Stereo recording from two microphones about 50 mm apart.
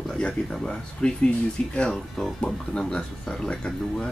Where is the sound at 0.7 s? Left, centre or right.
Centre.